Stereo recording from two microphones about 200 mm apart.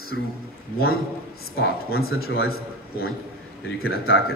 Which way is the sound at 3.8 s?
90° left.